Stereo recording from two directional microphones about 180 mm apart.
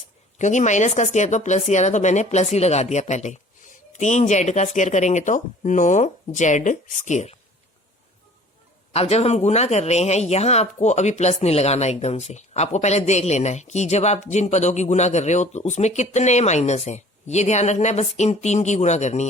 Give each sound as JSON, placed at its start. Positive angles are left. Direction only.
{"t": 0.3, "sound": "speech", "side_deg": 40}
{"t": 8.9, "sound": "speech", "side_deg": 35}